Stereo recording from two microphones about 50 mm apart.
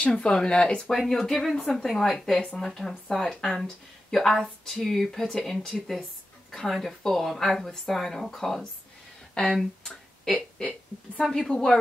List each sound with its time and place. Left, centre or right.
0.0 s speech: centre
4.1 s speech: centre
9.3 s a sound: centre
11.2 s speech: centre